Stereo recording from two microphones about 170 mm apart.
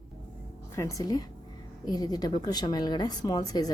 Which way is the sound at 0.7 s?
15° left (ahead or behind).